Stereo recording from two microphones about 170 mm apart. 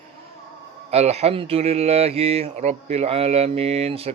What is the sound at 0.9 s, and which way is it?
Speech, 40° right (ahead or behind).